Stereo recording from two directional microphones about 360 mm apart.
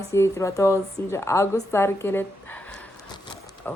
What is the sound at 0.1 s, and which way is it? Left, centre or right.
A woman's voice, centre.